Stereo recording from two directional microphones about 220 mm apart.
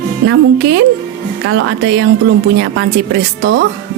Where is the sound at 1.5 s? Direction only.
55° right (ahead or behind).